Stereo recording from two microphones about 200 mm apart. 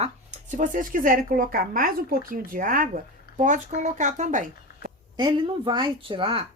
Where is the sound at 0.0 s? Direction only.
35° right (ahead or behind).